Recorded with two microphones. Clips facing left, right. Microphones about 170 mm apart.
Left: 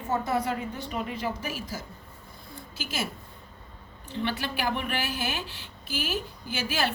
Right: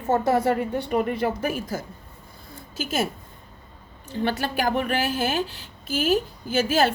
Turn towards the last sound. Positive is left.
turn(degrees=-45)  # may be behind; listen again after turning